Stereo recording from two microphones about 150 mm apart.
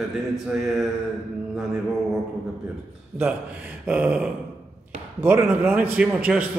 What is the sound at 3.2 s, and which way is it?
A man's voice, 10° right (ahead or behind).